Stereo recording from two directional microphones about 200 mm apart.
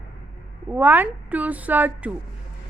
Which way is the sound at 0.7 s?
10° right (ahead or behind).